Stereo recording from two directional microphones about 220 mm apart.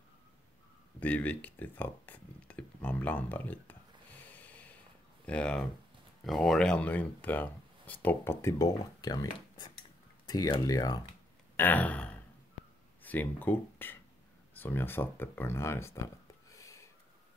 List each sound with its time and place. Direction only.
0.9 s speech: 5° left (ahead or behind)
4.2 s snort: 5° left (ahead or behind)
5.2 s speech: 5° left (ahead or behind)
16.4 s a sound: 15° left (ahead or behind)